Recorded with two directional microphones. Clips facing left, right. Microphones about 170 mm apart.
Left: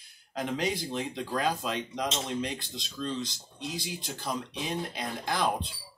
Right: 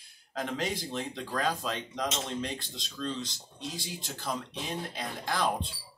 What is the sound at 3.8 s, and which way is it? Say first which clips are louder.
Speech: left 1 dB; centre (ahead or behind).